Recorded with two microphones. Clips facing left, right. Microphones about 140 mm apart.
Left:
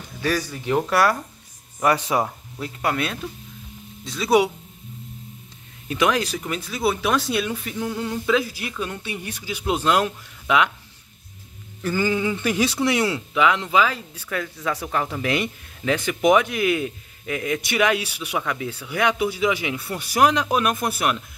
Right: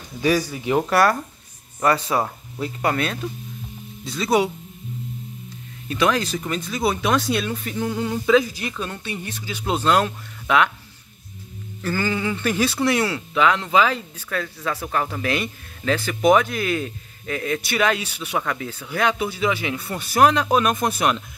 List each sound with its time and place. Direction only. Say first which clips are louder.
0.2 s speech: right 4 dB; 10° right (ahead or behind)
1.8 s speech: even; 15° left (ahead or behind)
2.2 s speech: right 3 dB; centre (ahead or behind)
5.9 s speech: even; 15° left (ahead or behind)
11.8 s speech: left 2 dB; 15° left (ahead or behind)